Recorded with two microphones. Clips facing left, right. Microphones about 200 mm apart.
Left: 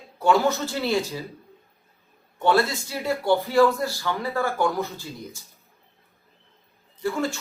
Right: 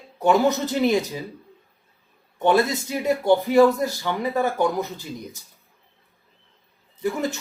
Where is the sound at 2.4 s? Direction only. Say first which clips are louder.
Right 2 dB; 20° right (ahead or behind).